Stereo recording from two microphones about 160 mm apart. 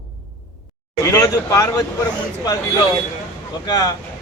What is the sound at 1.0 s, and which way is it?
Speech, 20° left (ahead or behind).